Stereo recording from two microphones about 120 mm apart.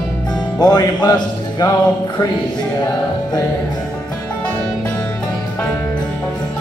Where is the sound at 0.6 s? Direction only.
35° left (ahead or behind).